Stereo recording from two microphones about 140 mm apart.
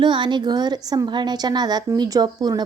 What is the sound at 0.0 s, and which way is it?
A woman's voice, 35° right (ahead or behind).